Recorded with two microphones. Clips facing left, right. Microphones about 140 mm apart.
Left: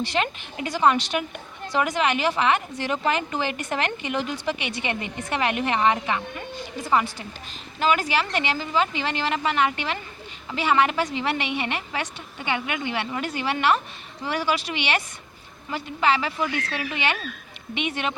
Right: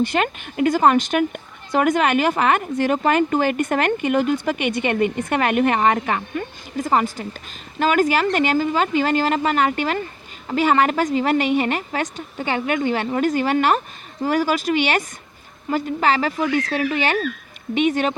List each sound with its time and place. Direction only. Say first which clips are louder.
0.0 s speech: right 5 dB; 50° right (ahead or behind)